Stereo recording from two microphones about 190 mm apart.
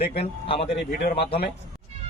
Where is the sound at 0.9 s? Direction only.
50° left (ahead or behind).